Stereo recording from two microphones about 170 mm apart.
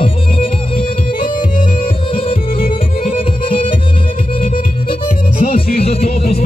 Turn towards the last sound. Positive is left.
turn(degrees=35)  # may be behind; listen again after turning